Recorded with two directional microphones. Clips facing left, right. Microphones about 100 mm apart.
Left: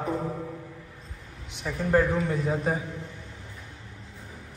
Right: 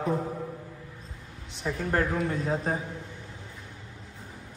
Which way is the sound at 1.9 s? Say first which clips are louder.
Left 5 dB; centre (ahead or behind).